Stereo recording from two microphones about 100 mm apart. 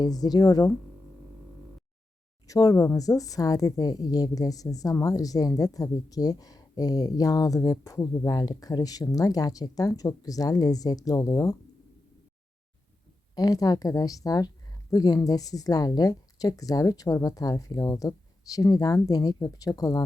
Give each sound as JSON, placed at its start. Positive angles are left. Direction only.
{"t": 0.0, "sound": "speech", "side_deg": 40}
{"t": 2.5, "sound": "speech", "side_deg": 35}
{"t": 8.4, "sound": "speech", "side_deg": 40}
{"t": 13.3, "sound": "speech", "side_deg": 40}